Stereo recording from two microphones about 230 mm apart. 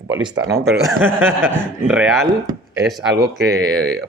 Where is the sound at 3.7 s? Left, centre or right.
Centre.